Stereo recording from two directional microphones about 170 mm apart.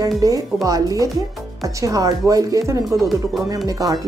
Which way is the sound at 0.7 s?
20° right (ahead or behind).